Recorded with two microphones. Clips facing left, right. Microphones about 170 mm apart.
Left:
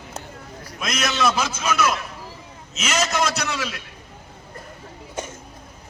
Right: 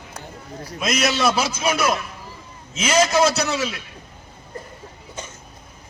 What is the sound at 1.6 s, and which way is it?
A man's voice, 35° right (ahead or behind).